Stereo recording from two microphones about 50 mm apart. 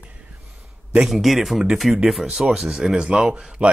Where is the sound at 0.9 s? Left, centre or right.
Centre.